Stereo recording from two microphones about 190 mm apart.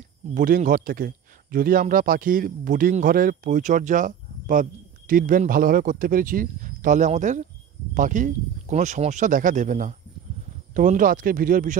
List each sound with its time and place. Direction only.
0.3 s a man's voice: 45° right (ahead or behind)